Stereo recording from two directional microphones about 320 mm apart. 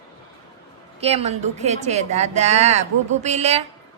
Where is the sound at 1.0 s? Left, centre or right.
Centre.